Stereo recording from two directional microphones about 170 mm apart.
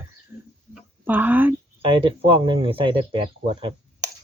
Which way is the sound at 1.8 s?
30° right (ahead or behind).